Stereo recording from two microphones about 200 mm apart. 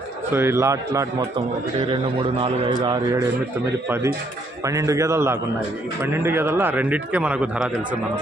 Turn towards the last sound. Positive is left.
turn(degrees=-5)  # may be behind; listen again after turning